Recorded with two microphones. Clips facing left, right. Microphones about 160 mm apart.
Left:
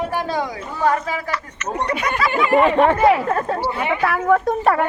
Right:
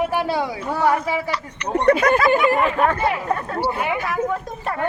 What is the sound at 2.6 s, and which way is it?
Speech, 30° left (ahead or behind).